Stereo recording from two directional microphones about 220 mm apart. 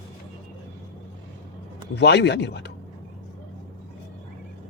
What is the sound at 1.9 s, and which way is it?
Speech, 50° left (ahead or behind).